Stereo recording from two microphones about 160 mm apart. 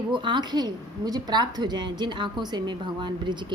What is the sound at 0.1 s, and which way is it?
A woman's voice, 30° right (ahead or behind).